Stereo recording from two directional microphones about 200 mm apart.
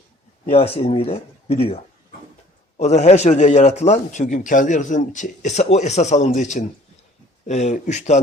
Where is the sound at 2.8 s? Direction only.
35° left (ahead or behind).